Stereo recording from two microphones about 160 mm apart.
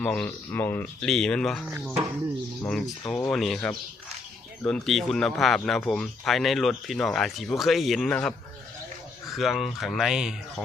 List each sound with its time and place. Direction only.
0.0 s speech: 5° left (ahead or behind)
2.6 s speech: 5° left (ahead or behind)
9.3 s speech: centre (ahead or behind)